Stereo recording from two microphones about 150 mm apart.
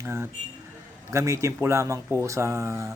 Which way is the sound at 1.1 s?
20° right (ahead or behind).